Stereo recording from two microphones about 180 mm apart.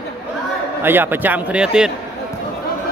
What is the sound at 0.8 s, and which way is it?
A man's voice, 10° right (ahead or behind).